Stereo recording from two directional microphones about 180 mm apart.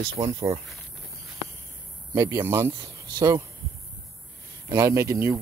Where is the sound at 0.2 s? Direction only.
30° right (ahead or behind).